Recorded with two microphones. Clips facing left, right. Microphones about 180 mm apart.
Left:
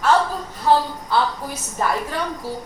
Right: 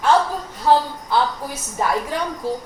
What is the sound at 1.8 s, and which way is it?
Speech, 15° right (ahead or behind).